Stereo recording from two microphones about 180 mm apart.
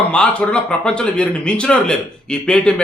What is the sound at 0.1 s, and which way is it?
Speech, 5° left (ahead or behind).